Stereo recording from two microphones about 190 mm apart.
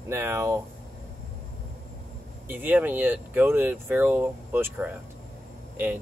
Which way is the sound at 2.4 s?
10° right (ahead or behind).